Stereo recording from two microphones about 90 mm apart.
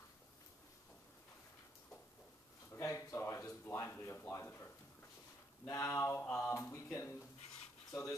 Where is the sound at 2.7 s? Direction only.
30° left (ahead or behind).